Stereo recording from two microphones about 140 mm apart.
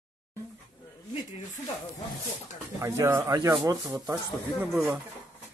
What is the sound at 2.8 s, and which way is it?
Speech, 20° right (ahead or behind).